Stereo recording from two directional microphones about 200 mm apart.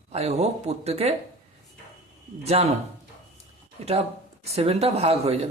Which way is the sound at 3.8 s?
30° right (ahead or behind).